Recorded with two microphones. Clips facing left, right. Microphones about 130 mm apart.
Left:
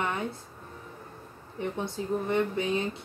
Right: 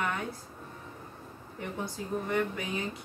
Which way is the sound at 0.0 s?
25° left (ahead or behind).